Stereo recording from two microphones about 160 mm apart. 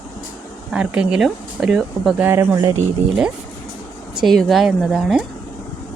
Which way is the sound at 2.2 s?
15° right (ahead or behind).